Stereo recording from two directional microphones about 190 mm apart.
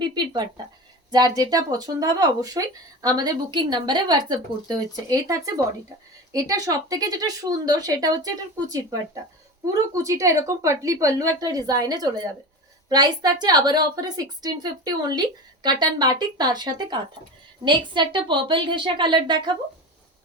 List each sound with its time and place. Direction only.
0.0 s speech: 20° right (ahead or behind)